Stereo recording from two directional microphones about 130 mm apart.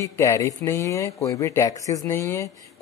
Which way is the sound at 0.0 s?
25° left (ahead or behind).